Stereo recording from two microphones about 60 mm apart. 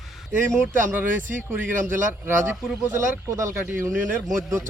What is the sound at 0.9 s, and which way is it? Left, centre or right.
Speech, right.